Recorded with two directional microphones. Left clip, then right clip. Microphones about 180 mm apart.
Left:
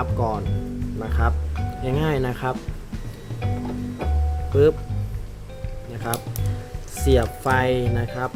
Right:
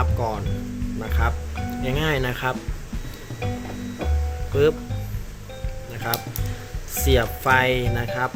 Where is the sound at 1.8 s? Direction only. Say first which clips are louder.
Even; 30° left (ahead or behind).